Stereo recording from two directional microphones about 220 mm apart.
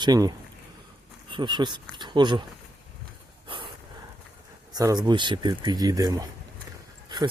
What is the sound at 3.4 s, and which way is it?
Dog, 20° right (ahead or behind).